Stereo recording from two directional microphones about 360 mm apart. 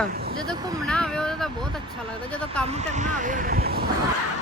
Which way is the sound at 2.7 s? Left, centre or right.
Centre.